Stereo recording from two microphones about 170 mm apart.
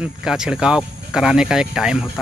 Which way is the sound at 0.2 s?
5° right (ahead or behind).